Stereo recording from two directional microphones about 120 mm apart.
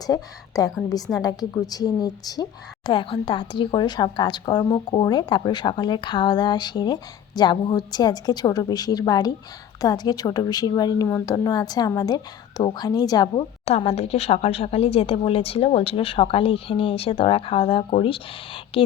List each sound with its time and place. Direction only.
0.1 s a woman's voice: 30° left (ahead or behind)
13.7 s speech: 60° left (ahead or behind)